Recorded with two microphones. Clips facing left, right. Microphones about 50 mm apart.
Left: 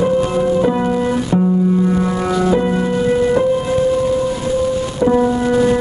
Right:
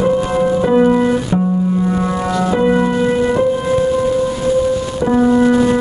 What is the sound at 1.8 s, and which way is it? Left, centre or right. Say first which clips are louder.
Music: left 1 dB; centre.